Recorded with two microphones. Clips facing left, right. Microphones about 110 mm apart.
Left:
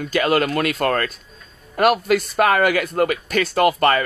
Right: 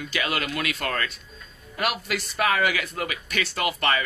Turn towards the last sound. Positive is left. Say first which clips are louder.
# left 9 dB
turn(degrees=45)  # may be behind; listen again after turning